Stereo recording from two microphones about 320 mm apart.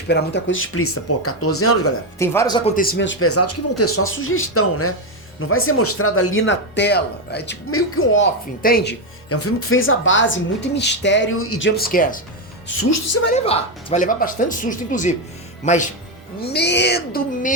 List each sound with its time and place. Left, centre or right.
0.1 s speech: left
2.1 s speech: centre
2.7 s speech: left
9.3 s speech: left
11.8 s speech: left
13.3 s speech: centre